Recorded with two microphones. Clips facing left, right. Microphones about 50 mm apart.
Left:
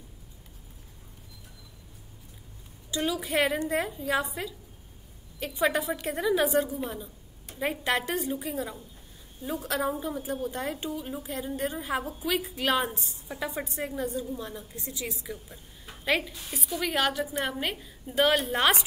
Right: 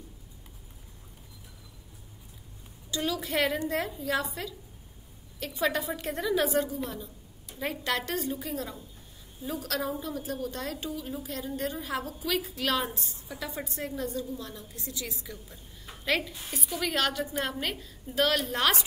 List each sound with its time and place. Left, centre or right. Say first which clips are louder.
2.9 s a woman's voice: left 2 dB; centre
5.9 s a woman's voice: left 3 dB; centre